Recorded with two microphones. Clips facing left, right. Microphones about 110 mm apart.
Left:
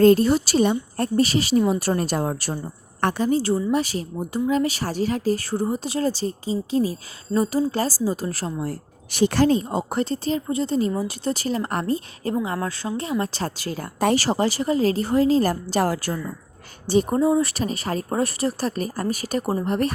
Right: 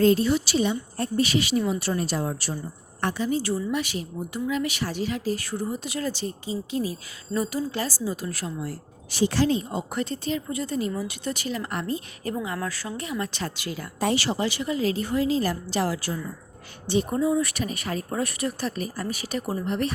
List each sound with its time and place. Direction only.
0.0 s a woman's voice: 45° left (ahead or behind)
9.1 s speech: 55° left (ahead or behind); by 12.3 s 40° left (ahead or behind)
12.3 s a woman's voice: 25° left (ahead or behind); by 16.2 s 50° left (ahead or behind)
16.8 s speech: 40° left (ahead or behind)